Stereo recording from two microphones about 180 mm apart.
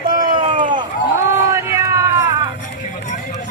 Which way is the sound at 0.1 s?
50° right (ahead or behind).